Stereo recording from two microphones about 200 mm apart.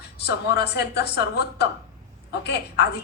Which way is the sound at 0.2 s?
55° left (ahead or behind).